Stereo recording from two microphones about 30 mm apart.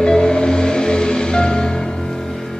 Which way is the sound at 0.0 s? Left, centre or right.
Left.